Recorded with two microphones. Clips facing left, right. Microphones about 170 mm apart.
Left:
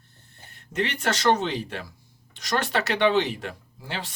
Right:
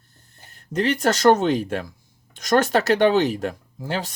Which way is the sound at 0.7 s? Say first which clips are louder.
Right 6 dB; 35° right (ahead or behind).